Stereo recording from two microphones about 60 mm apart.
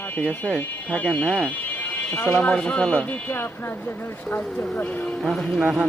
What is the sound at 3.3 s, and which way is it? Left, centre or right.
Speech, left.